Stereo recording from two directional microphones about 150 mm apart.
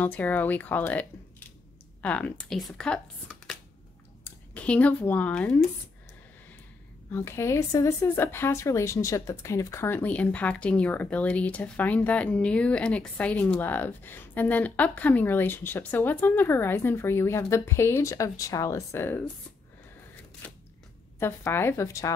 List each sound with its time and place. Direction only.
0.0 s speech: 10° left (ahead or behind)
4.2 s speech: 10° left (ahead or behind)
7.1 s speech: 20° left (ahead or behind)
20.4 s a sound: 10° left (ahead or behind)
21.2 s speech: 15° left (ahead or behind)